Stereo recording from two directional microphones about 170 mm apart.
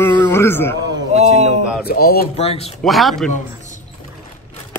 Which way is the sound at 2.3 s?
40° left (ahead or behind).